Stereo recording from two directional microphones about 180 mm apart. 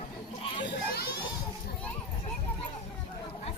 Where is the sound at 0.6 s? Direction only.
65° left (ahead or behind).